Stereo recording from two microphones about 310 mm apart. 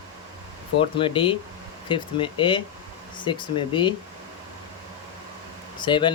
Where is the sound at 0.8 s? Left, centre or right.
Centre.